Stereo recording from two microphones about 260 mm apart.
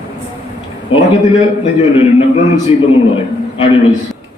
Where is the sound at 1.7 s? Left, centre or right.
Left.